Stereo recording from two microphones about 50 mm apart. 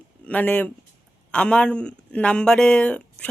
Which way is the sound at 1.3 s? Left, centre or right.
Left.